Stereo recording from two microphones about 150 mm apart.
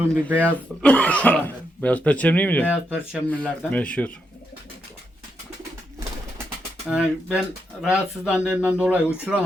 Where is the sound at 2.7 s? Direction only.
5° right (ahead or behind).